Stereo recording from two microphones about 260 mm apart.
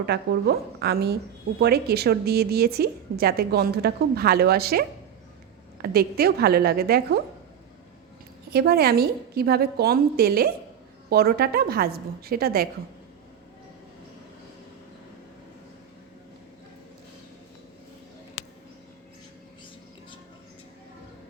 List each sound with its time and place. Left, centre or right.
0.0 s a woman's voice: right
8.4 s a woman's voice: right